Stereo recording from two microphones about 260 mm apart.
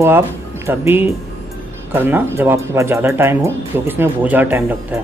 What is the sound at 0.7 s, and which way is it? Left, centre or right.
Speech, centre.